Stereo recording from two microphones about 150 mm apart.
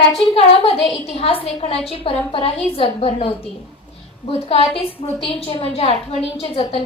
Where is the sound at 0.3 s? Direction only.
40° left (ahead or behind).